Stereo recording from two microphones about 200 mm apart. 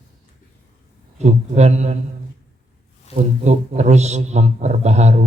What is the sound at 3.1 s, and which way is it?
A man's voice, 35° right (ahead or behind).